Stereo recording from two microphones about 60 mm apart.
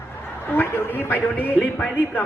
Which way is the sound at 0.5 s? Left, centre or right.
Left.